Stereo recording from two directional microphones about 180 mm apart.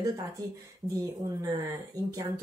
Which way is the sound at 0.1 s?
20° right (ahead or behind).